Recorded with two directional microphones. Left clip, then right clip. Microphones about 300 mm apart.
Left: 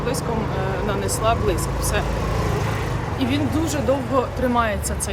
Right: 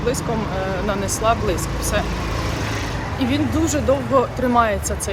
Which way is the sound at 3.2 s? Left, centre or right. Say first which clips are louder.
Right 3 dB; centre.